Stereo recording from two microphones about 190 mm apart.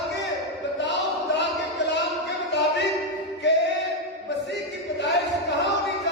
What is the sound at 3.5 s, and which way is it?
Singing, 65° left (ahead or behind).